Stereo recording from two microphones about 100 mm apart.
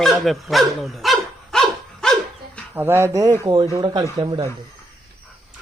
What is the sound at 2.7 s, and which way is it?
Speech, 20° right (ahead or behind).